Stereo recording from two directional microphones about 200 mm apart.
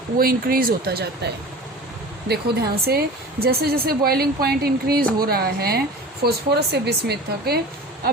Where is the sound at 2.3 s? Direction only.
50° right (ahead or behind).